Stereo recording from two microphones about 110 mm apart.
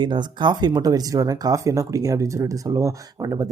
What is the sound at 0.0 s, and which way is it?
Speech, 45° right (ahead or behind).